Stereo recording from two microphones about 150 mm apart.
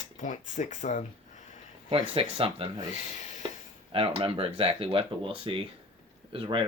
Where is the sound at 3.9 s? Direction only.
40° right (ahead or behind).